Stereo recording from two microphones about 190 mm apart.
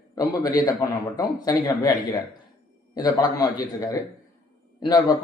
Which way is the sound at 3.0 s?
20° left (ahead or behind).